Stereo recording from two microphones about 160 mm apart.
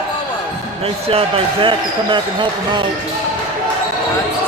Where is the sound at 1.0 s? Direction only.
40° right (ahead or behind).